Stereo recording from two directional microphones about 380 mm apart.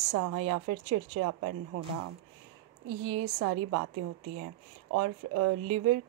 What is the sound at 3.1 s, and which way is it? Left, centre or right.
Speech, right.